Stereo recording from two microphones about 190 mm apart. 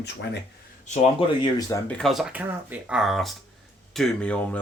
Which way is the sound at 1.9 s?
Centre (ahead or behind).